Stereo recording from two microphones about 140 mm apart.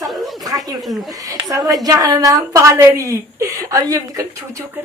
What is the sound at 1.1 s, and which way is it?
A woman's voice, 25° right (ahead or behind).